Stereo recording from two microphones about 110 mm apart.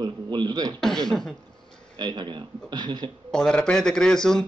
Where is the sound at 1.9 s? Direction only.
40° right (ahead or behind).